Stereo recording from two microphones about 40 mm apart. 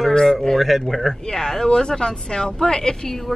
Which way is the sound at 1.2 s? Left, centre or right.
Centre.